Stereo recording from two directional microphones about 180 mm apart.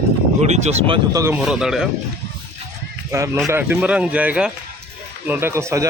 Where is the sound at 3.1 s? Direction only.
15° right (ahead or behind).